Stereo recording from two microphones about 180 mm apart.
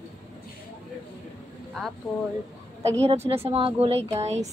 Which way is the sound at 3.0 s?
35° right (ahead or behind).